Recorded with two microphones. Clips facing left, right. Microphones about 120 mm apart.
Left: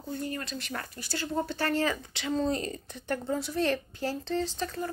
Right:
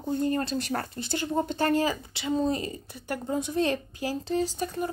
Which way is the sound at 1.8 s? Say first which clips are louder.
Right 2 dB; 5° right (ahead or behind).